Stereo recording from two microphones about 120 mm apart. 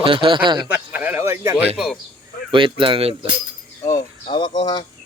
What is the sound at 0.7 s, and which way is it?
Speech, 15° right (ahead or behind).